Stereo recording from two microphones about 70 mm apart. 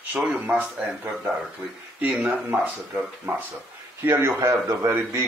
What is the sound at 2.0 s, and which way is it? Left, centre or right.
Speech, right.